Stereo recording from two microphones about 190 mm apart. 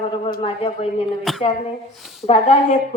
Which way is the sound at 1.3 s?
Centre (ahead or behind).